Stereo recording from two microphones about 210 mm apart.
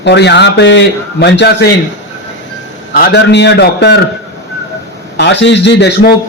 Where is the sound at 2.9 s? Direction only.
50° left (ahead or behind).